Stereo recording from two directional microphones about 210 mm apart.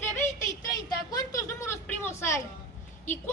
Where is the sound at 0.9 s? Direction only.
15° left (ahead or behind).